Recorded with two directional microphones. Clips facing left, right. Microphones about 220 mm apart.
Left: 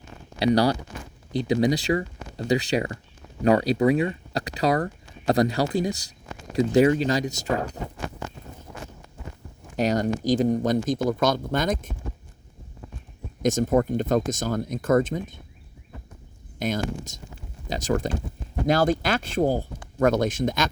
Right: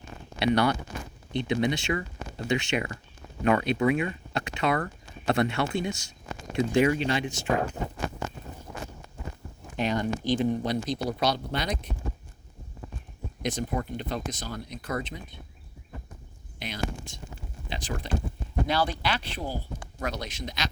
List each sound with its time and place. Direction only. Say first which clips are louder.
0.3 s speech: left 4 dB; 35° left (ahead or behind)
9.7 s speech: left 5 dB; 40° left (ahead or behind)
13.4 s speech: left 9 dB; 45° left (ahead or behind)
16.6 s speech: left 7 dB; 45° left (ahead or behind)